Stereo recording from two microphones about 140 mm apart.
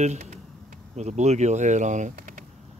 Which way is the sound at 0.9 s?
55° right (ahead or behind).